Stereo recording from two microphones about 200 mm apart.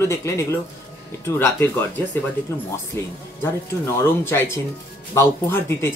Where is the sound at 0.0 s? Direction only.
15° left (ahead or behind).